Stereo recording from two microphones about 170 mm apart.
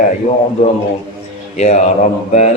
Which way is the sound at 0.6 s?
40° left (ahead or behind).